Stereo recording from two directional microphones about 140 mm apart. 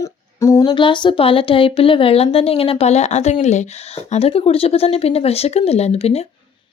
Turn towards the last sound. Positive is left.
turn(degrees=45)  # may be behind; listen again after turning